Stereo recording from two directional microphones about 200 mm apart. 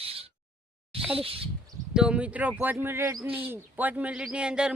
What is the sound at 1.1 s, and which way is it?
Speech, 30° right (ahead or behind).